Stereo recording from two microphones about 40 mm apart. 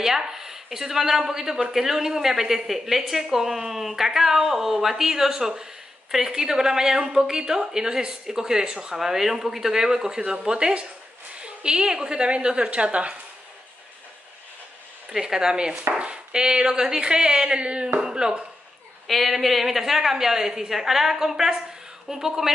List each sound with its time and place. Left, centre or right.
0.0 s speech: centre
8.9 s speech: centre; by 13.2 s right
15.1 s speech: centre
19.0 s speech: centre